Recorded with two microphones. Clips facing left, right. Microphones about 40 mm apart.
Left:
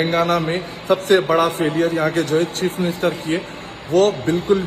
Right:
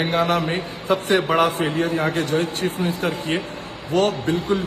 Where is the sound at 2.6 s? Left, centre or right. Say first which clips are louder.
Left 3 dB; left.